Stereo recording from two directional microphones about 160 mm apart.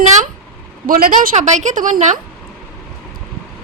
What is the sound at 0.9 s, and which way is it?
Speech, 65° right (ahead or behind).